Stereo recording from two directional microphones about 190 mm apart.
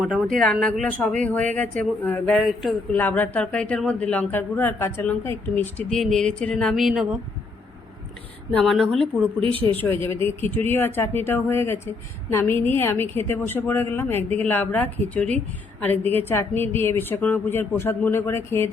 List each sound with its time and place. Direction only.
0.0 s a woman's voice: centre (ahead or behind)
8.5 s a woman's voice: centre (ahead or behind)
9.4 s speech: 30° right (ahead or behind)
10.1 s a woman's voice: 10° left (ahead or behind)